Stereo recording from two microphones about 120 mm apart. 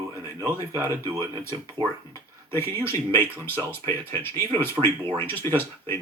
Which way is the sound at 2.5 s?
20° left (ahead or behind).